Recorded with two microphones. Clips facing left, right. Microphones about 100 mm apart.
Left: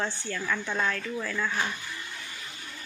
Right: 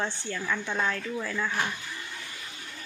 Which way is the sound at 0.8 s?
20° right (ahead or behind).